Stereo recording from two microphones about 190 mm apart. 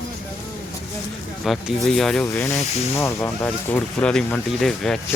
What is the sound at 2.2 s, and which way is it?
Speech, 15° left (ahead or behind).